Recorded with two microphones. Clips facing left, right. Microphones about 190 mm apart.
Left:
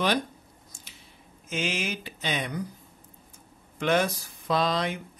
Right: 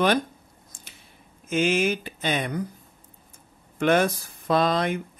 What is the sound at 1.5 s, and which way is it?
Speech, 50° right (ahead or behind).